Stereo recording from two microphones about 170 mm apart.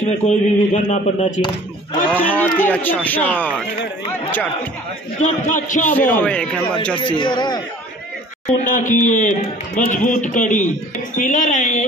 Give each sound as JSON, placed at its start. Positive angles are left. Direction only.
{"t": 0.0, "sound": "speech", "side_deg": 45}
{"t": 2.3, "sound": "speech", "side_deg": 10}
{"t": 5.2, "sound": "speech", "side_deg": 45}
{"t": 5.9, "sound": "speech", "side_deg": 10}
{"t": 7.0, "sound": "a man's voice", "side_deg": 30}
{"t": 8.5, "sound": "speech", "side_deg": 50}